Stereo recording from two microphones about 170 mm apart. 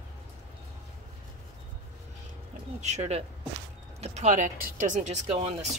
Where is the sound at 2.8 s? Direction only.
40° right (ahead or behind).